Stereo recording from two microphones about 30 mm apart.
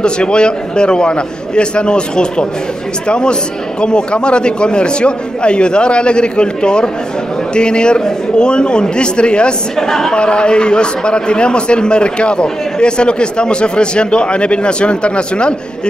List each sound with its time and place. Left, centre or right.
0.0 s a man's voice: left
9.8 s a woman's voice: centre
10.1 s a man's voice: left